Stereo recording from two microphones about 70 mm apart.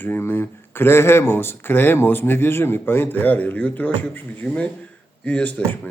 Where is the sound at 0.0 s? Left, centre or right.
Left.